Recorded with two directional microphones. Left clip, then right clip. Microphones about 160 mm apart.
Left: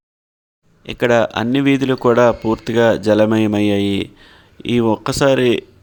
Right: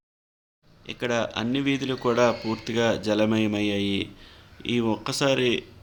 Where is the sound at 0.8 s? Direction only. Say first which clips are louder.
Left 12 dB; 55° left (ahead or behind).